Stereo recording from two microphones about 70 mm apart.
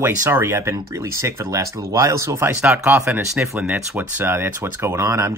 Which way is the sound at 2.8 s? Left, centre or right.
Right.